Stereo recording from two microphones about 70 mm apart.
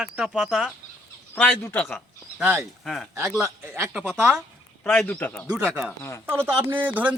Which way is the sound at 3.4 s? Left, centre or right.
Right.